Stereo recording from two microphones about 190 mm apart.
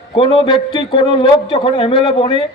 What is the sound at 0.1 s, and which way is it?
Speech, 30° left (ahead or behind).